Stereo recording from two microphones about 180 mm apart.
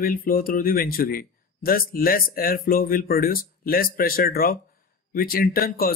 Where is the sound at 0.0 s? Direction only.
50° left (ahead or behind).